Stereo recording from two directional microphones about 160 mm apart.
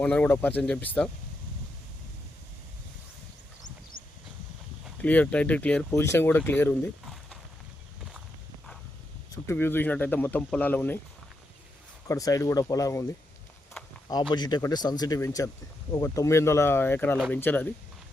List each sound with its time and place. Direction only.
0.0 s speech: 10° left (ahead or behind)
3.9 s vehicle: 65° left (ahead or behind)
5.0 s speech: 10° left (ahead or behind)
9.3 s speech: 15° left (ahead or behind)
12.0 s speech: 20° left (ahead or behind)
14.1 s speech: 25° left (ahead or behind); by 17.7 s 10° left (ahead or behind)